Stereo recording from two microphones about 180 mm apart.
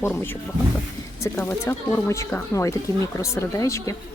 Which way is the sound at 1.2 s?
15° left (ahead or behind).